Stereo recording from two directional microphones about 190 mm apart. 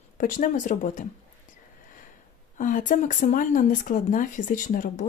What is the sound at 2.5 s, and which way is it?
Speech, 45° left (ahead or behind).